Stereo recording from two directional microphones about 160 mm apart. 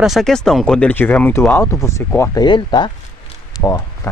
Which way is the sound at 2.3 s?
25° left (ahead or behind).